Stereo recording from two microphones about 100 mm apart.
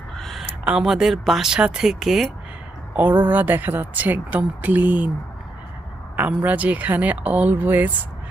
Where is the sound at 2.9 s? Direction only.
15° right (ahead or behind).